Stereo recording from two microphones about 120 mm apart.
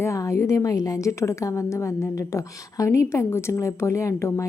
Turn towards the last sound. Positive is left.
turn(degrees=25)  # may be behind; listen again after turning